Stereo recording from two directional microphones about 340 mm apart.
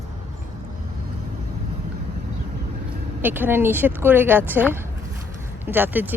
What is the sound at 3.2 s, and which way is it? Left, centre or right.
Speech, centre.